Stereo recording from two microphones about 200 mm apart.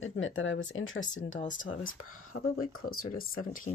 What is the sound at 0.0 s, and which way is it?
Speech, 75° left (ahead or behind).